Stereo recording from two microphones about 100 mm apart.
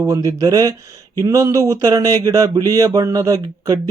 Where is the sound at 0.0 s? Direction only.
35° right (ahead or behind).